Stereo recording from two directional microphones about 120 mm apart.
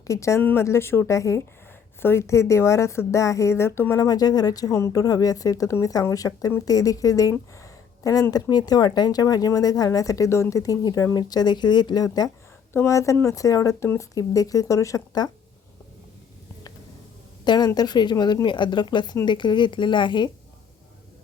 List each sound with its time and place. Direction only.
0.1 s speech: 25° left (ahead or behind)
17.4 s a woman's voice: 40° left (ahead or behind)